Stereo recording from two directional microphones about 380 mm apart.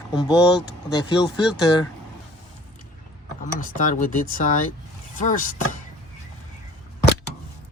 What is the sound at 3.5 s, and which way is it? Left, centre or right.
Speech, centre.